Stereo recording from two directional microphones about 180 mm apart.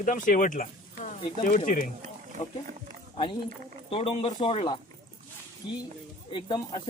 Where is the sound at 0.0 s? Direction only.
45° left (ahead or behind).